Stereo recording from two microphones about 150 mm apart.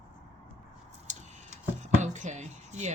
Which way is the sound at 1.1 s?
55° right (ahead or behind).